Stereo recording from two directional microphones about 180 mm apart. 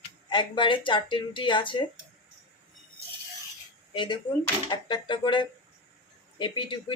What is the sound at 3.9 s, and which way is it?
Speech, 25° left (ahead or behind).